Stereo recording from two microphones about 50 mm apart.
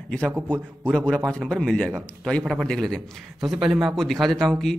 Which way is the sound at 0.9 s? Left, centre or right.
Centre.